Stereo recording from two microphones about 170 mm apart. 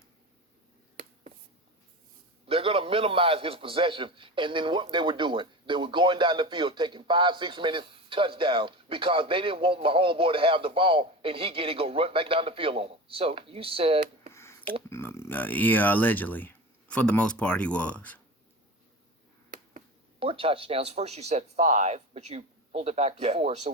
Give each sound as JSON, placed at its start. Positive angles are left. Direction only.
{"t": 2.5, "sound": "a man's voice", "side_deg": -35}
{"t": 14.3, "sound": "a sound", "side_deg": 15}
{"t": 14.8, "sound": "speech", "side_deg": 15}
{"t": 20.1, "sound": "a man's voice", "side_deg": -30}